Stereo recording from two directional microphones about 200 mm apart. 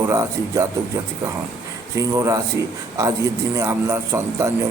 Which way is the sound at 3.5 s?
15° right (ahead or behind).